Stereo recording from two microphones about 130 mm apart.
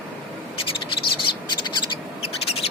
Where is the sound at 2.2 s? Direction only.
50° left (ahead or behind).